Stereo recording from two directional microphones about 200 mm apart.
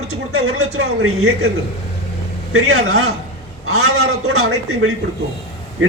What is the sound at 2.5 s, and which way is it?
A man's voice, 90° right.